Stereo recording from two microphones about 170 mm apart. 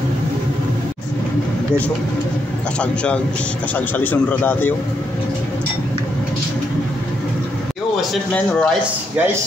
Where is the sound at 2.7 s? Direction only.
5° left (ahead or behind).